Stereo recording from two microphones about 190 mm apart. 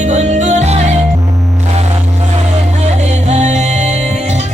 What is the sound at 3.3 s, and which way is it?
Music, 35° right (ahead or behind).